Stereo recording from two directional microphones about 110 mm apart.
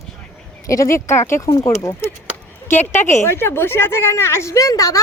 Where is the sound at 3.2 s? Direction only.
20° left (ahead or behind).